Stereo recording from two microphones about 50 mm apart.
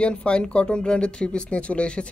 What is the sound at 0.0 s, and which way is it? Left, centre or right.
Speech, left.